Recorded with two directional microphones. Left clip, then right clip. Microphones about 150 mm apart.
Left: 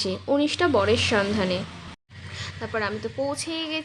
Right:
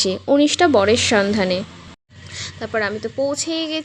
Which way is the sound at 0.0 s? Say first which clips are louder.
Right 7 dB; 45° right (ahead or behind).